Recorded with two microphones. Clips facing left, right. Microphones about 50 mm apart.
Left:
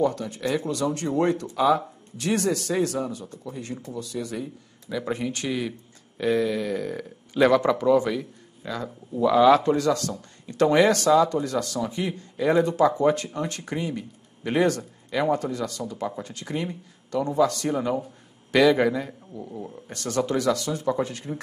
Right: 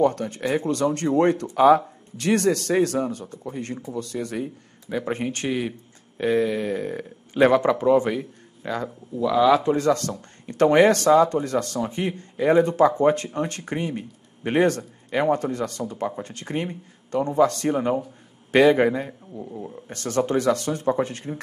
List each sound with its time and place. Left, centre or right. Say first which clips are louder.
0.0 s speech: right 3 dB; right
9.1 s speech: left 1 dB; centre
9.8 s speech: right 2 dB; right
19.3 s speech: right 1 dB; centre
19.9 s speech: right 2 dB; right